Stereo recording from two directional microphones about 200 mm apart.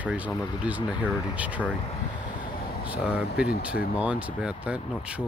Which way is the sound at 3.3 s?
50° left (ahead or behind).